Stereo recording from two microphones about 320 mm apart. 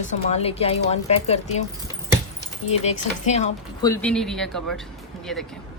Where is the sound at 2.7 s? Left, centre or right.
Left.